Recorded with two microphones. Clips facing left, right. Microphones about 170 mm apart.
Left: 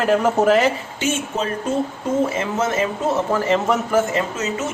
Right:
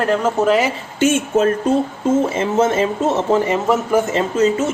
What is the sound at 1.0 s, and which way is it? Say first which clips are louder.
Speech: right 8 dB; 50° right (ahead or behind).